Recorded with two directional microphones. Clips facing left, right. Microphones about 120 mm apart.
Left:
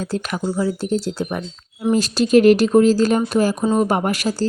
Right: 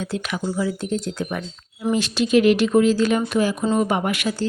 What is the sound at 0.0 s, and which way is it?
Speech, 40° left (ahead or behind).